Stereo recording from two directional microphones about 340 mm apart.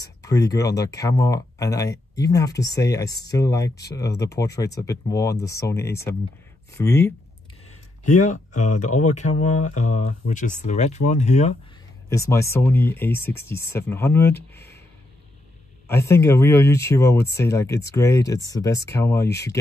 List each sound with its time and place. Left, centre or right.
0.0 s speech: centre
8.2 s speech: left
12.1 s speech: centre
15.9 s speech: centre